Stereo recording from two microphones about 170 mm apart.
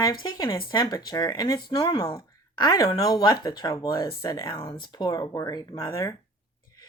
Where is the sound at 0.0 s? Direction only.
25° left (ahead or behind).